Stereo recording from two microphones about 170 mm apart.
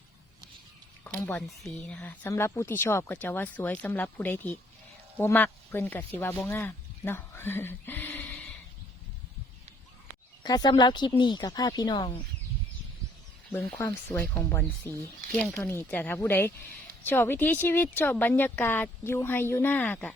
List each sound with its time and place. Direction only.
1.3 s speech: centre (ahead or behind)
10.4 s speech: 25° left (ahead or behind)
13.5 s speech: 10° left (ahead or behind)